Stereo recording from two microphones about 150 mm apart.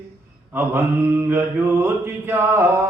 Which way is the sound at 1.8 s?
15° right (ahead or behind).